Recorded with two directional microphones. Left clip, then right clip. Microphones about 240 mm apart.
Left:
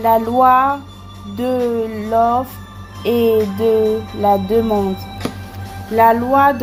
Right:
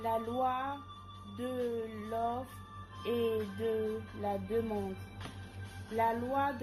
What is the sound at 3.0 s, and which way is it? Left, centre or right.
Speech, left.